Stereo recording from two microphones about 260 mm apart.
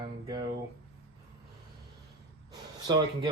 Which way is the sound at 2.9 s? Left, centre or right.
Centre.